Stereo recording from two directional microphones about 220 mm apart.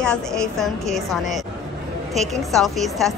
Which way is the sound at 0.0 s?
Centre (ahead or behind).